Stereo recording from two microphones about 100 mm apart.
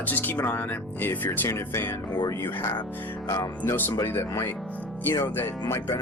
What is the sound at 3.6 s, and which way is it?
Speech, 20° left (ahead or behind).